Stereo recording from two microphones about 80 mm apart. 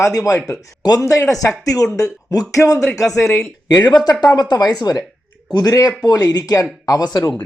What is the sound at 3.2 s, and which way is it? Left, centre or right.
Speech, left.